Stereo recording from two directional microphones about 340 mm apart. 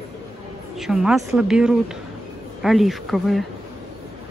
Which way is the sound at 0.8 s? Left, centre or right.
Centre.